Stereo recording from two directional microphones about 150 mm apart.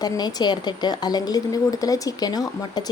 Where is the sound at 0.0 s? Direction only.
25° left (ahead or behind).